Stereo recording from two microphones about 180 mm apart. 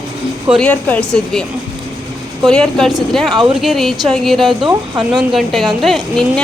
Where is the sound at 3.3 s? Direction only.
25° right (ahead or behind).